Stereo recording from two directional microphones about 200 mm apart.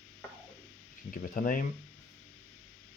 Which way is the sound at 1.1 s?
45° left (ahead or behind).